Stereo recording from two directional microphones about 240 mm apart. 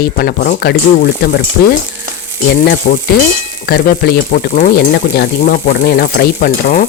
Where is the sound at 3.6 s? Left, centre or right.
Left.